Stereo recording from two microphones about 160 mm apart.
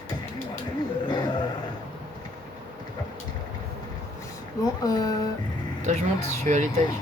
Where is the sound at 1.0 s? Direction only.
30° left (ahead or behind).